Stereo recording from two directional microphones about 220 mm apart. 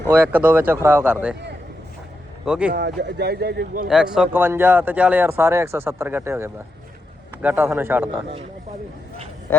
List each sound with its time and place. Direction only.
0.1 s speech: 5° right (ahead or behind)
2.4 s speech: 5° right (ahead or behind)
2.7 s speech: 50° right (ahead or behind)
3.8 s speech: 5° right (ahead or behind)
9.5 s speech: 5° left (ahead or behind)